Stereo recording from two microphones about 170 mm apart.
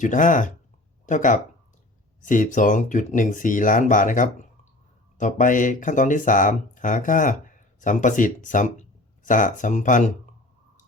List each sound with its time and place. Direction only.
0.0 s speech: 50° left (ahead or behind)